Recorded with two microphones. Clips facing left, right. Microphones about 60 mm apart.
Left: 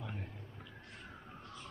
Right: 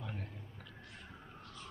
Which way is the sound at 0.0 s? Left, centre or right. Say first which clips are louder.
Even; centre.